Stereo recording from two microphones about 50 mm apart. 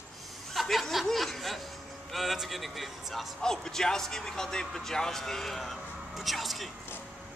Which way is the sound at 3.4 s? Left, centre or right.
Centre.